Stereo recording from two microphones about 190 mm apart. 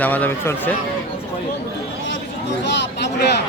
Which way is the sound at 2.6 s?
65° left (ahead or behind).